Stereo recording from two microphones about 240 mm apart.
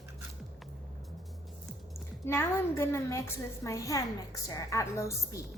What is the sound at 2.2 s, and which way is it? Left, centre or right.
A woman's voice, centre.